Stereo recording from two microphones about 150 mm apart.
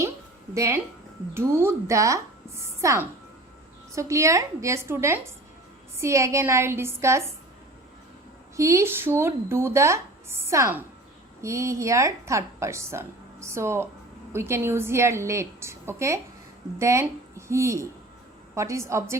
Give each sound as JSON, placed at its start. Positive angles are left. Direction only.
{"t": 0.5, "sound": "speech", "side_deg": -20}
{"t": 8.5, "sound": "speech", "side_deg": -20}